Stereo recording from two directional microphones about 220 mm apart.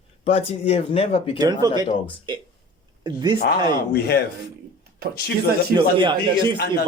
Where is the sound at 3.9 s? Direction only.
50° left (ahead or behind).